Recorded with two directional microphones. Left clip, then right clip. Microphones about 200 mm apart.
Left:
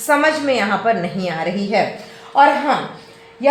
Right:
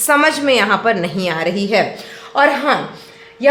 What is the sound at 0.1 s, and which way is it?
A woman's voice, 35° right (ahead or behind).